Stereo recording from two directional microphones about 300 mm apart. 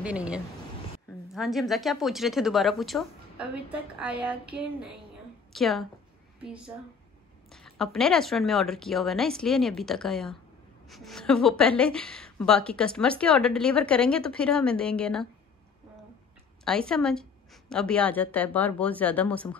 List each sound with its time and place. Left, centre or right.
0.0 s a woman's voice: centre
7.5 s a woman's voice: centre
16.6 s a woman's voice: centre